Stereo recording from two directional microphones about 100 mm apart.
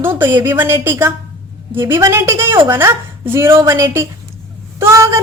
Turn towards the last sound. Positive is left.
turn(degrees=-30)  # may be behind; listen again after turning